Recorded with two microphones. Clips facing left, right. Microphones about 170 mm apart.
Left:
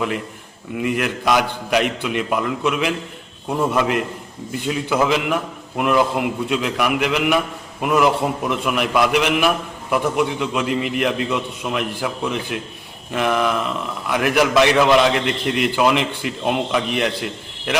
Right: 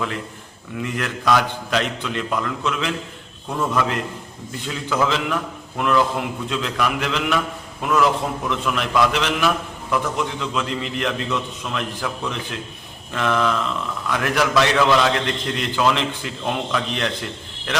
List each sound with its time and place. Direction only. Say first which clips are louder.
0.9 s a man's voice: even; 15° left (ahead or behind)
4.6 s a man's voice: left 3 dB; 15° left (ahead or behind)